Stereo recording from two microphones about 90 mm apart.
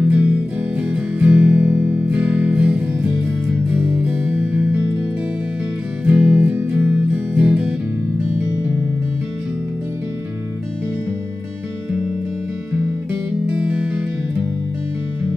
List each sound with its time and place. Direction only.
0.0 s music: 15° right (ahead or behind)
6.0 s music: 20° right (ahead or behind)
12.7 s music: 20° right (ahead or behind)